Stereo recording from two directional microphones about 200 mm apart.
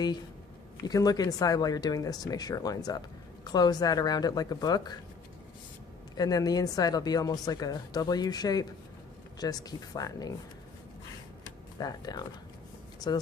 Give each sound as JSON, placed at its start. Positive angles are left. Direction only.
{"t": 0.8, "sound": "a woman's voice", "side_deg": 20}
{"t": 6.1, "sound": "a woman's voice", "side_deg": 20}
{"t": 11.8, "sound": "a woman's voice", "side_deg": 20}